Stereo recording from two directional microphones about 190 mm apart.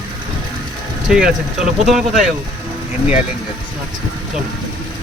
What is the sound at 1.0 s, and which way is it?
Speech, 5° right (ahead or behind).